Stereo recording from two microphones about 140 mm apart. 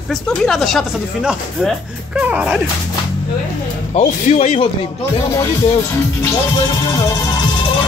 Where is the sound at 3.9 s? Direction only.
50° left (ahead or behind).